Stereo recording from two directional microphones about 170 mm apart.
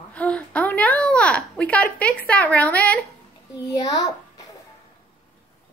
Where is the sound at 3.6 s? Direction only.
20° left (ahead or behind).